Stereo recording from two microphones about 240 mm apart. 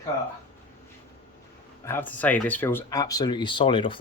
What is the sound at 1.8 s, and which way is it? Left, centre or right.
Speech, centre.